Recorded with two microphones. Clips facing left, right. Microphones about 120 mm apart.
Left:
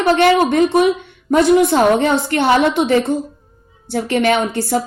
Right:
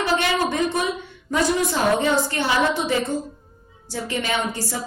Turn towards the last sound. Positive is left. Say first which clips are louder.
# left 9 dB
turn(degrees=65)  # may be behind; listen again after turning